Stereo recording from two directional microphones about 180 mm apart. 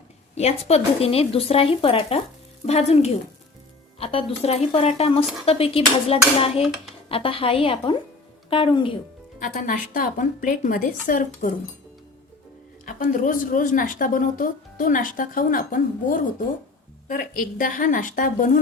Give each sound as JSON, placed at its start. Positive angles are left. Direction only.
{"t": 0.3, "sound": "a woman's voice", "side_deg": 35}
{"t": 9.5, "sound": "a woman's voice", "side_deg": 50}
{"t": 12.8, "sound": "a woman's voice", "side_deg": 45}